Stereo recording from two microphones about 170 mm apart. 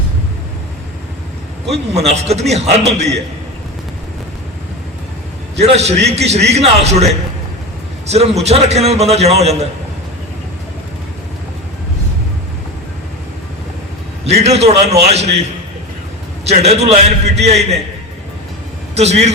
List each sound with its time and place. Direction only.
1.7 s a man's voice: 40° right (ahead or behind)
5.5 s a man's voice: 40° right (ahead or behind)
14.3 s a man's voice: 40° right (ahead or behind)
16.5 s a man's voice: 40° right (ahead or behind)
18.9 s a man's voice: 40° right (ahead or behind)